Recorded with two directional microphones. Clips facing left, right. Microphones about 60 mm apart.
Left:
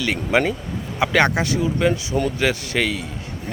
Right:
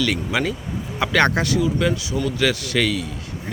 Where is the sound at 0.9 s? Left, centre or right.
Centre.